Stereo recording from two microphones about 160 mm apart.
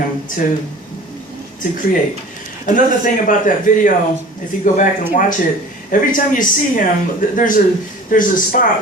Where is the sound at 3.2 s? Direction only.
55° left (ahead or behind).